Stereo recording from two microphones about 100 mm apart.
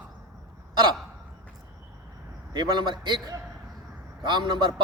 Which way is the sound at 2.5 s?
50° right (ahead or behind).